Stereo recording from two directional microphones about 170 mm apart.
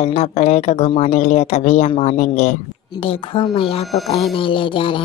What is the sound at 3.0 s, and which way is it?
Speech, 30° left (ahead or behind).